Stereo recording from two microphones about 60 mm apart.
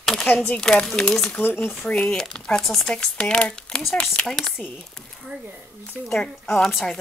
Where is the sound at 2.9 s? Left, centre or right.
Centre.